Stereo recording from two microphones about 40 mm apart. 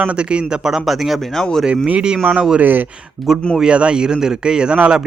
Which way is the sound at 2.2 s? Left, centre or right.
Right.